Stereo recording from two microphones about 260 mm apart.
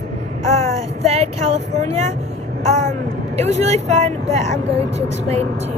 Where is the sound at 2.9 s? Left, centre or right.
Right.